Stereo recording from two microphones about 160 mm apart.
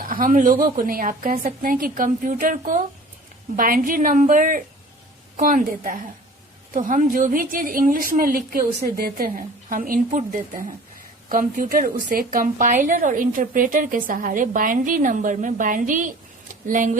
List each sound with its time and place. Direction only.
0.0 s a woman's voice: 60° right (ahead or behind)